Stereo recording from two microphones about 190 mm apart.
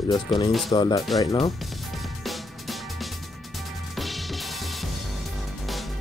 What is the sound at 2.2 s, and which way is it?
Music, centre (ahead or behind).